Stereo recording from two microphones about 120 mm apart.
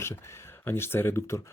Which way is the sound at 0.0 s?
20° left (ahead or behind).